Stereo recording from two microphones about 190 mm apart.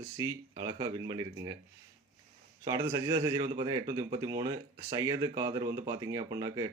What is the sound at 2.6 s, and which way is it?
Speech, 20° right (ahead or behind).